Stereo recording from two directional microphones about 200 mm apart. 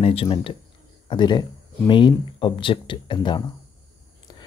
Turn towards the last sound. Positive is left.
turn(degrees=25)  # may be behind; listen again after turning